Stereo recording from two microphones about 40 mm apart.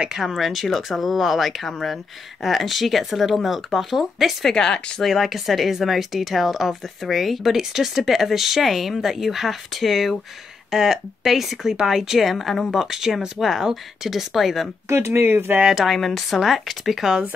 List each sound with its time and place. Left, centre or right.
0.1 s speech: centre
4.5 s speech: centre
5.0 s speech: centre
10.7 s speech: centre
15.0 s speech: right
15.7 s speech: centre